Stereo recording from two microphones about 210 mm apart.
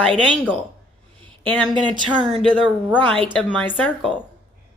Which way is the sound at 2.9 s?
5° left (ahead or behind).